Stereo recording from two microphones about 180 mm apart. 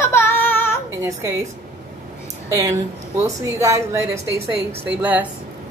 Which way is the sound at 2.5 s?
20° right (ahead or behind).